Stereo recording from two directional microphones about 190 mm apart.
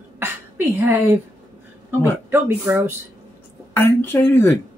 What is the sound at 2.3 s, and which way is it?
Speech, 10° right (ahead or behind).